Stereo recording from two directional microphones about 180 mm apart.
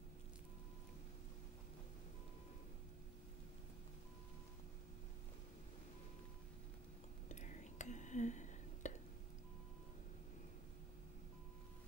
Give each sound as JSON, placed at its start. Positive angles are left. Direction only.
{"t": 7.2, "sound": "whispering", "side_deg": 40}